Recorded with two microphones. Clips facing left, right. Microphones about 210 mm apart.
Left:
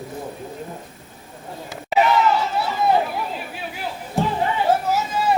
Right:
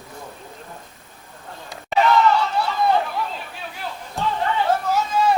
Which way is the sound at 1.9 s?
10° left (ahead or behind).